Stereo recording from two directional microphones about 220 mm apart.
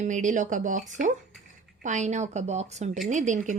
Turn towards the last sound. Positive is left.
turn(degrees=-35)  # may be behind; listen again after turning